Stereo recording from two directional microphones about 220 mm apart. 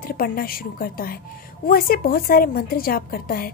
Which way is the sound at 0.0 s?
40° left (ahead or behind).